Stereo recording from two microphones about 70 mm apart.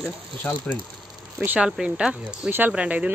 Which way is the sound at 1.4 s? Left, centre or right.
Centre.